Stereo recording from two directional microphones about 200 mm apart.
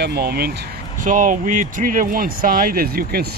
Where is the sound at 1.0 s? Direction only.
40° right (ahead or behind).